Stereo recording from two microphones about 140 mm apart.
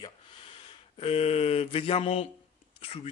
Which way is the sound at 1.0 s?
45° left (ahead or behind).